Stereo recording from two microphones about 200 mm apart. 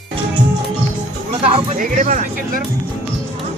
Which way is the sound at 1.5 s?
40° right (ahead or behind).